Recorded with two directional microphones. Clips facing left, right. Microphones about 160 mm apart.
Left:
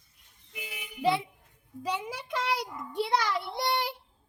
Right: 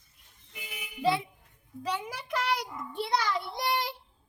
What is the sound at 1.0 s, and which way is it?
A child's voice, 20° left (ahead or behind).